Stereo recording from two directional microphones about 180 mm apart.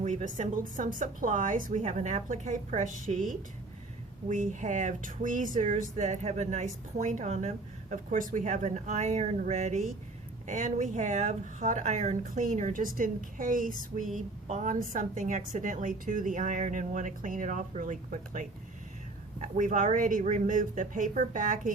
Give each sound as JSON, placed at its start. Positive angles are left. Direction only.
{"t": 0.0, "sound": "a woman's voice", "side_deg": -40}